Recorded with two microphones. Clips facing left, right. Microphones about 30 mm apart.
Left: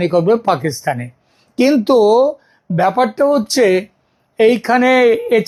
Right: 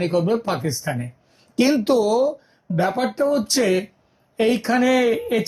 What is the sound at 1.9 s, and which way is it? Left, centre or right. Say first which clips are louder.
Speech: left 8 dB; left.